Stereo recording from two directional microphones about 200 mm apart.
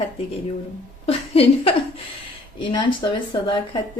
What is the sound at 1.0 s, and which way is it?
A woman's voice, 30° left (ahead or behind).